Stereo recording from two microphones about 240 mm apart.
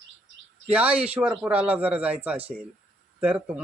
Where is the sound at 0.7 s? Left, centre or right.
Centre.